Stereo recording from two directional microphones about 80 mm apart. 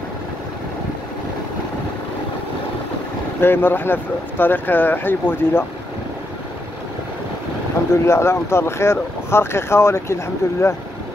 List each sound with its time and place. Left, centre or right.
3.3 s speech: left
7.9 s speech: left